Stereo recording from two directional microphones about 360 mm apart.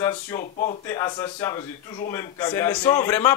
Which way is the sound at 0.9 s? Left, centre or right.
Centre.